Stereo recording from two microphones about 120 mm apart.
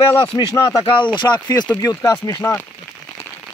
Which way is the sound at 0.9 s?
40° left (ahead or behind).